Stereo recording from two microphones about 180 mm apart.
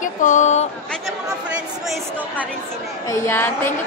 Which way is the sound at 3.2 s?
10° left (ahead or behind).